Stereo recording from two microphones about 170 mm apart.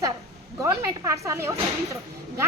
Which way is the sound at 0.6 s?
15° right (ahead or behind).